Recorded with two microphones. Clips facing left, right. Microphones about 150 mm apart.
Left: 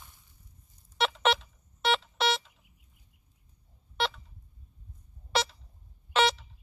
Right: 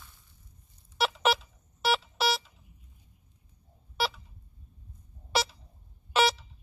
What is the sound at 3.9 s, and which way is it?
Pulse, 5° right (ahead or behind).